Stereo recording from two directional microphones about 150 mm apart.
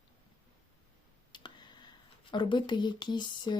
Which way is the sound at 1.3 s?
30° left (ahead or behind).